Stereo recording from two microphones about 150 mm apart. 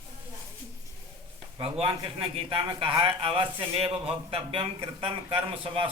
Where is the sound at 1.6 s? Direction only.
35° right (ahead or behind).